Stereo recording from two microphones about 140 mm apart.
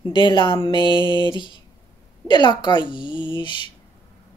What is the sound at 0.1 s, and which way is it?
Speech, 35° left (ahead or behind).